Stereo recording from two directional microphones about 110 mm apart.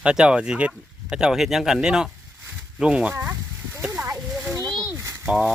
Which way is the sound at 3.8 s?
10° right (ahead or behind).